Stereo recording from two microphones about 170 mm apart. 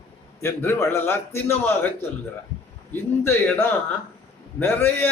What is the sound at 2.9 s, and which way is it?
Speech, 15° left (ahead or behind).